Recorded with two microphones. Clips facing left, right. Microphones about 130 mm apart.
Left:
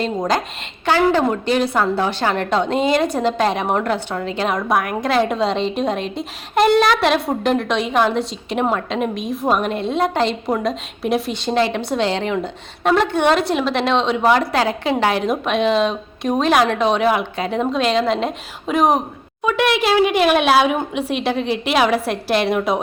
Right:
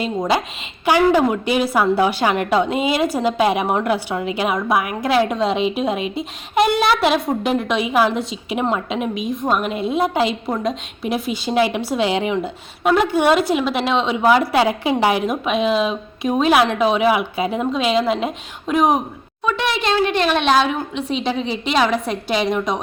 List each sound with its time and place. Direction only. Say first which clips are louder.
0.2 s a woman's voice: even; 5° right (ahead or behind)